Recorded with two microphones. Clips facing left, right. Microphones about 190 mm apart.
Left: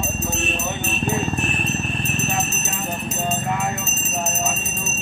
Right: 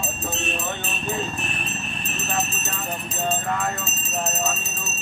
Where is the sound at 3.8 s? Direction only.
30° right (ahead or behind).